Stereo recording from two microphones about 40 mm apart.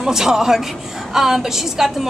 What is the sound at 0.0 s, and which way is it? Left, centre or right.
A woman's voice, centre.